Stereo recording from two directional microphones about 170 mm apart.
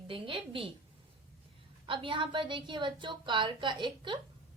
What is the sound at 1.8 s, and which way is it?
A woman's voice, 30° right (ahead or behind).